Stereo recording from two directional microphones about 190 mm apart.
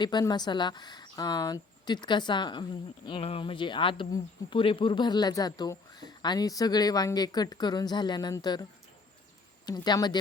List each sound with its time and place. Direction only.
0.0 s speech: 25° left (ahead or behind)
9.6 s speech: 20° left (ahead or behind)